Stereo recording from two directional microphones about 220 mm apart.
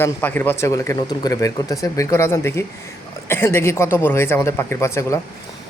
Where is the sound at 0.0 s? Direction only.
10° left (ahead or behind).